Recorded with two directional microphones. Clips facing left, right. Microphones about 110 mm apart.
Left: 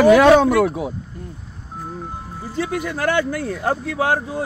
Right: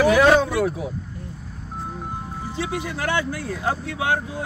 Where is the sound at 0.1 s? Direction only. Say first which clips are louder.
Left 5 dB; 70° left (ahead or behind).